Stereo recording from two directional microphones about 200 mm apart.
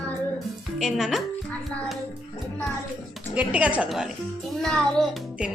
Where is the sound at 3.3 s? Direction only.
5° right (ahead or behind).